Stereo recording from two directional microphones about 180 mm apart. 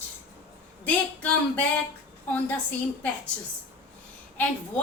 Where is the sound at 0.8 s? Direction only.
10° left (ahead or behind).